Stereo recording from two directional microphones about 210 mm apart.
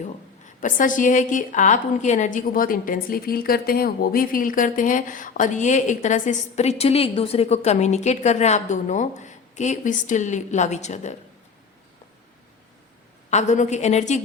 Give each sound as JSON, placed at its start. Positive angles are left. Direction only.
{"t": 0.0, "sound": "a woman's voice", "side_deg": 35}
{"t": 13.3, "sound": "a woman's voice", "side_deg": 35}